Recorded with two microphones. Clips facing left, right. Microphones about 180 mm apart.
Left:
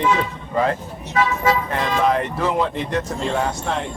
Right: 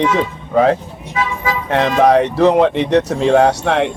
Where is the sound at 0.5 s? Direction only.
85° right.